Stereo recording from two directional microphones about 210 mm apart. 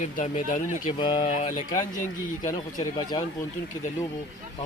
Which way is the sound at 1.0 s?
25° left (ahead or behind).